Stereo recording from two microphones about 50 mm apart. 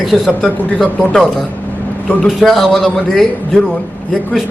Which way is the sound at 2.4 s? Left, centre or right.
Centre.